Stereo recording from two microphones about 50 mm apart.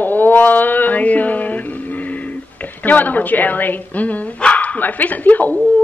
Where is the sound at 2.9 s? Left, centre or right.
Left.